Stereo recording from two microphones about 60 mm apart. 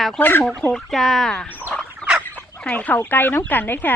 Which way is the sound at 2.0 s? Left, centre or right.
Centre.